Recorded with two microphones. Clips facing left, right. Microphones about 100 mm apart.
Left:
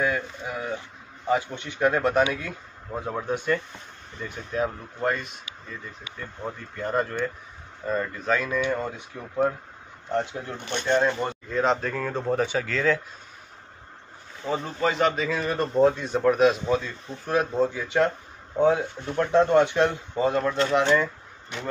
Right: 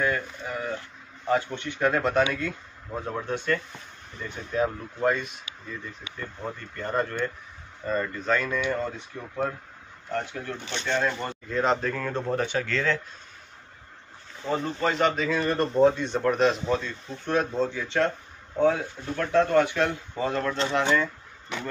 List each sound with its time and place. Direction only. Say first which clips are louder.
0.0 s speech: left 1 dB; 10° left (ahead or behind)
4.2 s speech: right 1 dB; centre (ahead or behind)
10.1 s speech: left 4 dB; 20° left (ahead or behind)
10.6 s speech: left 3 dB; 55° left (ahead or behind)
10.9 s speech: left 4 dB; 20° left (ahead or behind)
11.5 s speech: even; centre (ahead or behind)
14.4 s speech: left 1 dB; 5° left (ahead or behind)